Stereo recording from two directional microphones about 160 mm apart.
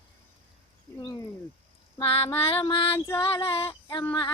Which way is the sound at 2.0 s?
35° left (ahead or behind).